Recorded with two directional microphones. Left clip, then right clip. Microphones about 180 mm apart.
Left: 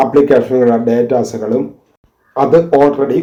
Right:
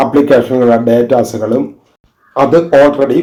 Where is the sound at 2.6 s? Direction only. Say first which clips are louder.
Right 3 dB; 35° left (ahead or behind).